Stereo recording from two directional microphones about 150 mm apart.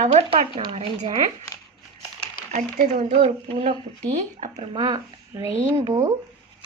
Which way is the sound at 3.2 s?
40° right (ahead or behind).